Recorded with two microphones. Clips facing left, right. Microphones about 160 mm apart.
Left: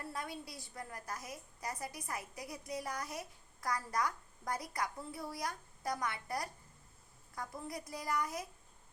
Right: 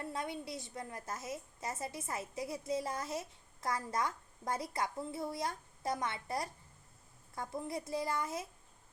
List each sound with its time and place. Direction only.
0.0 s a woman's voice: 20° right (ahead or behind)